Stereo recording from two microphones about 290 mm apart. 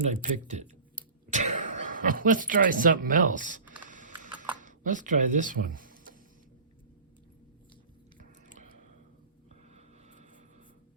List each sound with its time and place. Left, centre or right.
0.0 s speech: right
3.1 s typing: right
4.6 s speech: right